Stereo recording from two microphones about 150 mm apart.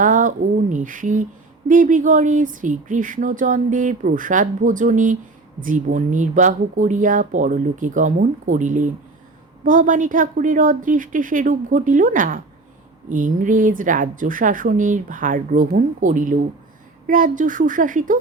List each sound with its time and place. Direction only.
0.0 s speech: 60° right (ahead or behind)